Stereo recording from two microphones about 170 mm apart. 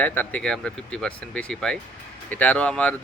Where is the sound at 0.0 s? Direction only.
10° left (ahead or behind).